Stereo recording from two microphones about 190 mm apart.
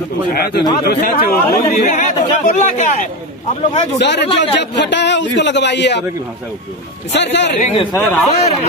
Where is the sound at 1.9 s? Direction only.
40° left (ahead or behind).